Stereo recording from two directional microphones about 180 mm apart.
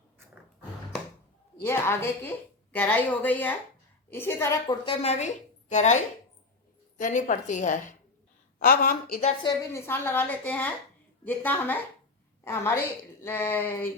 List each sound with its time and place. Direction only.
1.6 s a woman's voice: 15° left (ahead or behind)
4.6 s a woman's voice: 25° left (ahead or behind)
5.0 s a woman's voice: 40° left (ahead or behind)
7.0 s a woman's voice: 45° left (ahead or behind)
9.4 s a woman's voice: 20° left (ahead or behind)